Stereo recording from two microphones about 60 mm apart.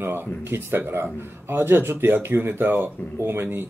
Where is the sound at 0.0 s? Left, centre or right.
Right.